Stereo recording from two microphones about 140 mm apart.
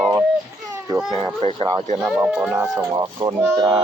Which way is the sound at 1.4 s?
50° right (ahead or behind).